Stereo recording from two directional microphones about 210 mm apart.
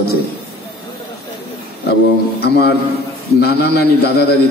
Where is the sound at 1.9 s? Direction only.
50° left (ahead or behind).